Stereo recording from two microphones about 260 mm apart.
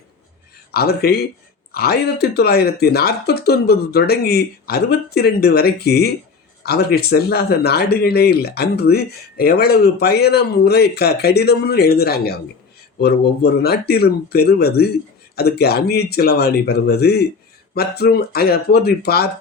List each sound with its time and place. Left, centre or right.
0.7 s speech: left